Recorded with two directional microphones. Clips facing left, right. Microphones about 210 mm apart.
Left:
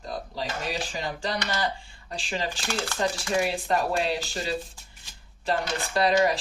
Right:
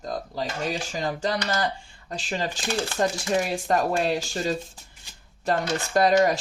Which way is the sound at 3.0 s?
45° right (ahead or behind).